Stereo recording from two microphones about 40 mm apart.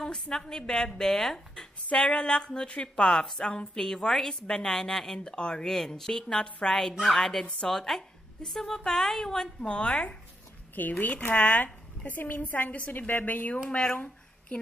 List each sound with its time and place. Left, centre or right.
0.0 s a woman's voice: centre
2.0 s a woman's voice: left
7.0 s a woman's voice: centre
9.6 s speech: left
10.7 s a woman's voice: left
13.9 s a sound: left